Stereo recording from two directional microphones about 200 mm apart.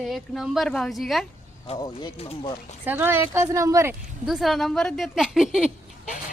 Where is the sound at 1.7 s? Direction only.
30° left (ahead or behind).